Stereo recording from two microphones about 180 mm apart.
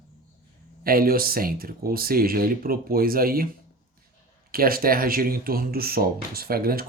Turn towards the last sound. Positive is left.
turn(degrees=-55)  # may be behind; listen again after turning